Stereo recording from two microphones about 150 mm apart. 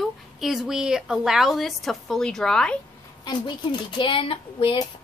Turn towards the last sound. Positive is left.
turn(degrees=35)  # may be behind; listen again after turning